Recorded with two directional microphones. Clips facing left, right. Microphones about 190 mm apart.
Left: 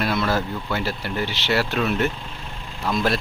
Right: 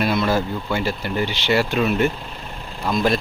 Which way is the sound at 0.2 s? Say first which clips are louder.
Right 3 dB; 15° right (ahead or behind).